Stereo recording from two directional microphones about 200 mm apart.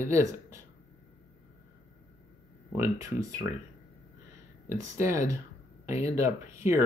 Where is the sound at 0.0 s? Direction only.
15° right (ahead or behind).